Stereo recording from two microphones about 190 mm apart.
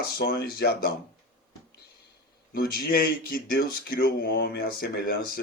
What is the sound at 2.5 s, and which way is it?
Speech, 50° left (ahead or behind).